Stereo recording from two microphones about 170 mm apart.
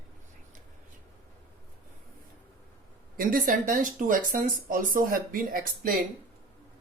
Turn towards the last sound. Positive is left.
turn(degrees=-55)  # may be behind; listen again after turning